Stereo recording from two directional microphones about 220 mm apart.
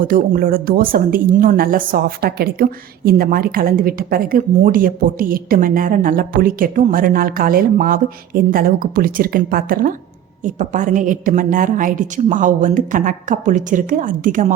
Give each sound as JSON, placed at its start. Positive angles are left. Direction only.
{"t": 0.0, "sound": "speech", "side_deg": -40}